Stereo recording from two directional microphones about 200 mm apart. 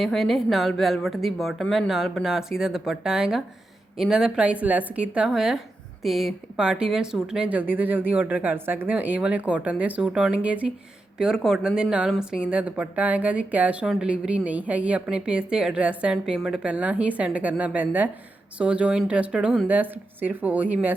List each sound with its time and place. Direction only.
0.0 s a woman's voice: centre (ahead or behind)